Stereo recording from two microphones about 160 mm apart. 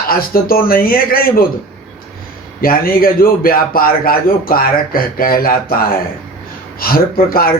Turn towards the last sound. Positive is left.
turn(degrees=65)  # may be behind; listen again after turning